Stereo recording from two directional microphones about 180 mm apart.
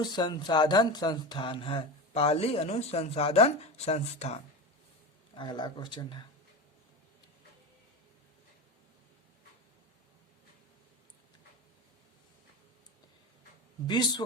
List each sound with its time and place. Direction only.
0.0 s speech: 25° left (ahead or behind)
5.3 s speech: 25° left (ahead or behind)
13.8 s speech: 25° left (ahead or behind)